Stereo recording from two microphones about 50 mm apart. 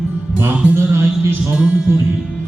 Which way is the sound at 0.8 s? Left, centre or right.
Right.